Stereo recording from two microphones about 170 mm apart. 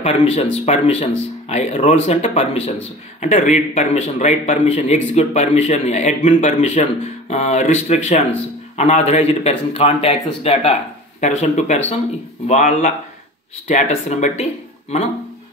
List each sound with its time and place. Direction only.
0.0 s a man's voice: 35° left (ahead or behind)